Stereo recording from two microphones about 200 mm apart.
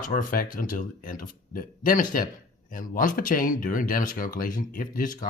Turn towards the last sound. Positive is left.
turn(degrees=40)  # may be behind; listen again after turning